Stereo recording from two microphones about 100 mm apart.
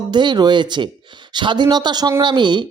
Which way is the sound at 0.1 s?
50° right (ahead or behind).